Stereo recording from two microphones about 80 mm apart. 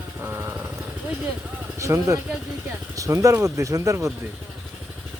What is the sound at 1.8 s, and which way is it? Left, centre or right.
Speech, right.